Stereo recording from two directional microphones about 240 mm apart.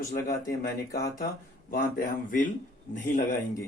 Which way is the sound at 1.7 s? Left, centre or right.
Left.